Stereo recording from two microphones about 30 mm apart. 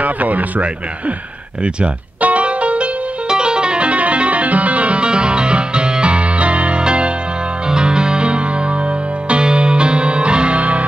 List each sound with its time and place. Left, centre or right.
0.0 s a sound: right
2.2 s music: right
3.3 s music: right
5.0 s music: right
6.8 s music: right